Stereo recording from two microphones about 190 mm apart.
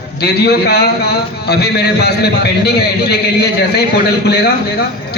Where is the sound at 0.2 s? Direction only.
60° left (ahead or behind).